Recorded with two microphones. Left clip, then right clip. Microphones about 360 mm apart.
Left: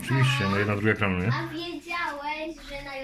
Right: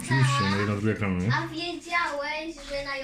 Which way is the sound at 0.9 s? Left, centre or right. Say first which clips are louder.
Left 5 dB; left.